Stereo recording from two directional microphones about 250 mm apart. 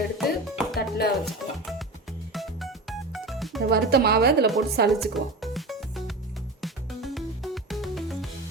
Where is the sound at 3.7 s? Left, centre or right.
Right.